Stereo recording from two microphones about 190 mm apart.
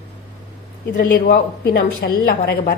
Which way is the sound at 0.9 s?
50° left (ahead or behind).